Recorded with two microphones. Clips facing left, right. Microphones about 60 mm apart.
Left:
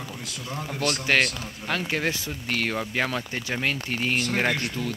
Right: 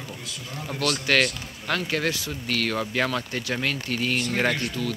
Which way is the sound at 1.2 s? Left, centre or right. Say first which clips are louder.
Right 1 dB; centre.